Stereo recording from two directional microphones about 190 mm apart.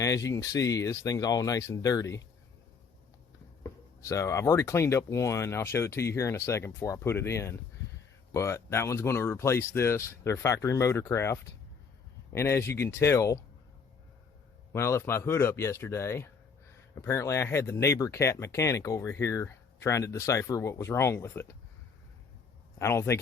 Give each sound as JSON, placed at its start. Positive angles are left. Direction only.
{"t": 0.0, "sound": "speech", "side_deg": 15}
{"t": 3.6, "sound": "speech", "side_deg": 15}
{"t": 14.7, "sound": "speech", "side_deg": 15}
{"t": 22.8, "sound": "speech", "side_deg": 15}